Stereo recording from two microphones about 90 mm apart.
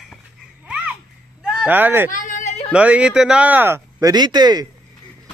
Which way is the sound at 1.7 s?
20° right (ahead or behind).